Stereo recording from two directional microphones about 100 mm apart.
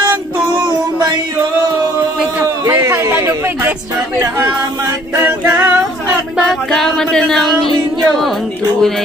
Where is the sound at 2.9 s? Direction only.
20° right (ahead or behind).